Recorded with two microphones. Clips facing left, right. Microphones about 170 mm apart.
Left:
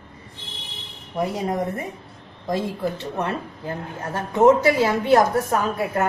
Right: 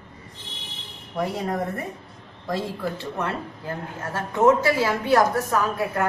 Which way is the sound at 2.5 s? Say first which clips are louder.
Left 3 dB; 20° left (ahead or behind).